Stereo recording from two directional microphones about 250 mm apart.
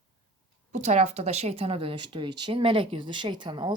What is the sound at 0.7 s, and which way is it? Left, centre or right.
A woman's voice, right.